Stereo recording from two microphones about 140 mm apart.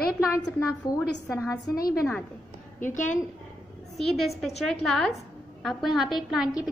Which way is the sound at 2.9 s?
65° left (ahead or behind).